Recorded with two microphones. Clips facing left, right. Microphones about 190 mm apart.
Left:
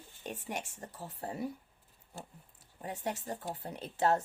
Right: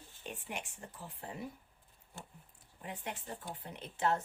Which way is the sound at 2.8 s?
40° left (ahead or behind).